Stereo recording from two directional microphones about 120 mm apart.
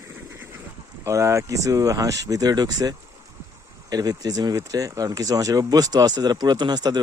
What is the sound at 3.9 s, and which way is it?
Speech, 30° right (ahead or behind).